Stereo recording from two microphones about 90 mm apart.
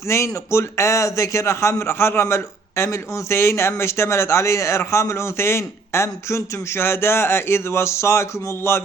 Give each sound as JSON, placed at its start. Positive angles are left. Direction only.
{"t": 0.1, "sound": "a man's voice", "side_deg": 30}